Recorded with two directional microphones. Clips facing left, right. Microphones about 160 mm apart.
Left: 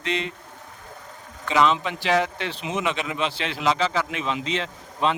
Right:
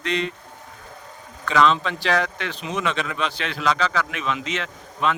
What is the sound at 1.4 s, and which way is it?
Speech, 20° left (ahead or behind).